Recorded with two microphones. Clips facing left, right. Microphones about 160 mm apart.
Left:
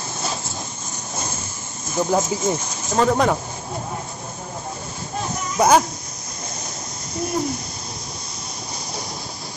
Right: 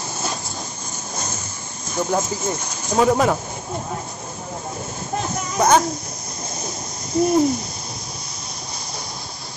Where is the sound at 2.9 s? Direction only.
5° right (ahead or behind).